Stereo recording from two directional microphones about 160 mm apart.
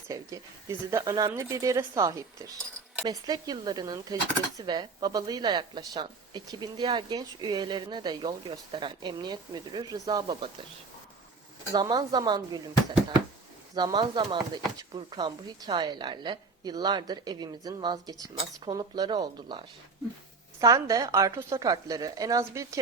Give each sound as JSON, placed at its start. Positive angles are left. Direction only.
{"t": 0.1, "sound": "speech", "side_deg": -20}
{"t": 11.7, "sound": "speech", "side_deg": -25}
{"t": 13.7, "sound": "speech", "side_deg": -25}